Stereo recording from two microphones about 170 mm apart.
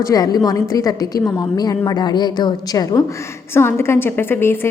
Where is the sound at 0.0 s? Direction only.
20° left (ahead or behind).